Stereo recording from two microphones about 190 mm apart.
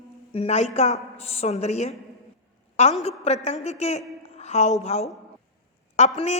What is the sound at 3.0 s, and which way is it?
A woman's voice, 35° left (ahead or behind).